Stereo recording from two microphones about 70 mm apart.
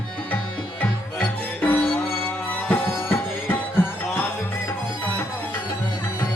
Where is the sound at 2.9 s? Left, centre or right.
Left.